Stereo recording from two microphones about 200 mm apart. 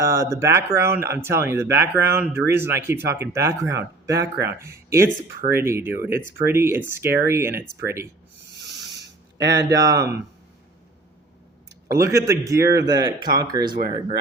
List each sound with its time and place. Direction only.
0.0 s speech: 15° right (ahead or behind)
9.5 s speech: 15° right (ahead or behind)
11.9 s speech: 15° right (ahead or behind)